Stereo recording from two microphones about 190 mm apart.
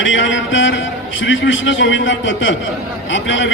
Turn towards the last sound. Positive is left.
turn(degrees=80)